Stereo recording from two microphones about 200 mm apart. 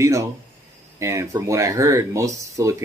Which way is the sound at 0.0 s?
15° right (ahead or behind).